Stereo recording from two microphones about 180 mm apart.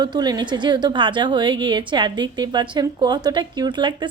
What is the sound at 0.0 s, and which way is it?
A woman's voice, 25° right (ahead or behind).